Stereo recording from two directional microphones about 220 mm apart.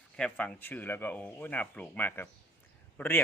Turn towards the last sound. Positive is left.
turn(degrees=10)  # may be behind; listen again after turning